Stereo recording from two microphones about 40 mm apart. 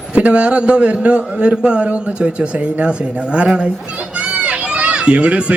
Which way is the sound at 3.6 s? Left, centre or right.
Right.